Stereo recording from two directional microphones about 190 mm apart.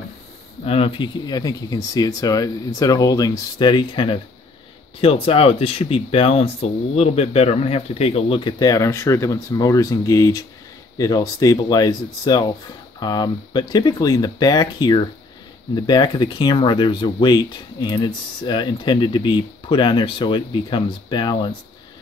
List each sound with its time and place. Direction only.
0.7 s speech: 30° left (ahead or behind)